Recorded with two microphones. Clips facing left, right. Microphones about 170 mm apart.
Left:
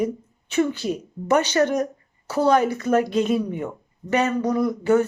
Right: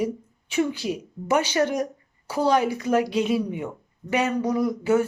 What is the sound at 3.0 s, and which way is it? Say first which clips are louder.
Speech: left 2 dB; 50° left (ahead or behind).